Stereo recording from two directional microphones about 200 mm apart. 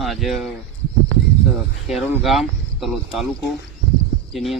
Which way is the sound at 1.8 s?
Centre (ahead or behind).